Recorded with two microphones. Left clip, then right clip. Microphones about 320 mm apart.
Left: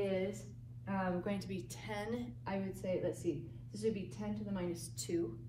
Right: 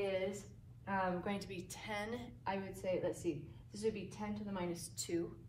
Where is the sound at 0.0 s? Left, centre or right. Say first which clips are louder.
Left 1 dB; centre.